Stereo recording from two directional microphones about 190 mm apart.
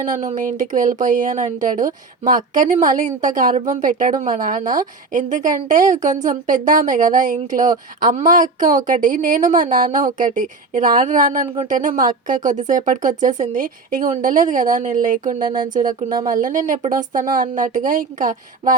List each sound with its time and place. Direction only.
0.2 s speech: 40° right (ahead or behind)